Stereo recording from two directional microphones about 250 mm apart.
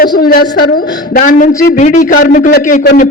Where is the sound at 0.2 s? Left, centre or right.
Left.